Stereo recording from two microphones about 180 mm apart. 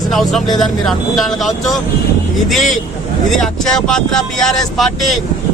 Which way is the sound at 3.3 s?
5° left (ahead or behind).